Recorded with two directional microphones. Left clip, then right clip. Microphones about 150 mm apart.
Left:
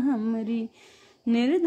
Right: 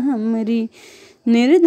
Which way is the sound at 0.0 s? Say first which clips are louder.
Right 6 dB; 20° right (ahead or behind).